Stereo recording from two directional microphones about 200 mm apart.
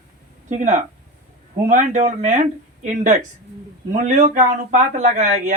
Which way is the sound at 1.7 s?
40° right (ahead or behind).